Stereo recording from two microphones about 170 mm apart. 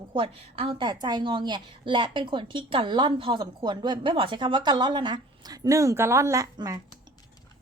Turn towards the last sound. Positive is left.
turn(degrees=-20)  # may be behind; listen again after turning